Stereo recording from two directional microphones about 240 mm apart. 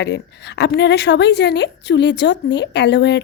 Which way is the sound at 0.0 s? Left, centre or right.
Left.